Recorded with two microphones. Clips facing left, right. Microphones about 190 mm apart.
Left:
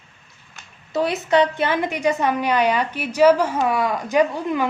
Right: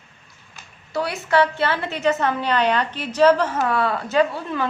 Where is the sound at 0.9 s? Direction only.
20° left (ahead or behind).